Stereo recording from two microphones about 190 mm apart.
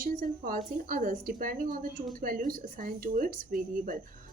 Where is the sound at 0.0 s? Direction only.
50° right (ahead or behind).